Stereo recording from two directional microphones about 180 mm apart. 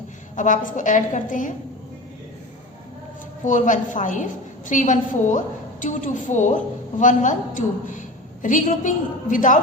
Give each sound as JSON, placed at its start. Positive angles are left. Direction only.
{"t": 0.3, "sound": "a woman's voice", "side_deg": 45}
{"t": 3.4, "sound": "a woman's voice", "side_deg": 45}